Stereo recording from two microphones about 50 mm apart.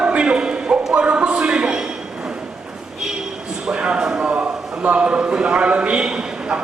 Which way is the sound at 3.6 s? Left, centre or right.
Centre.